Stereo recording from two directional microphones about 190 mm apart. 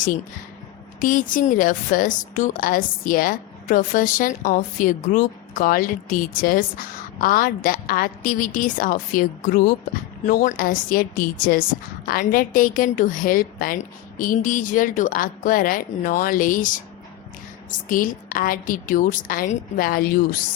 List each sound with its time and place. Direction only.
1.0 s a woman's voice: 45° left (ahead or behind)